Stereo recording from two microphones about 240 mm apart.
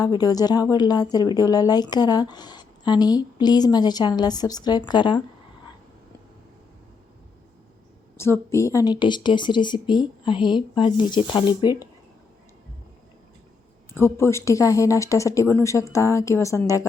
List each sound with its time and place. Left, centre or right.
0.0 s speech: centre
8.2 s speech: centre
13.9 s speech: centre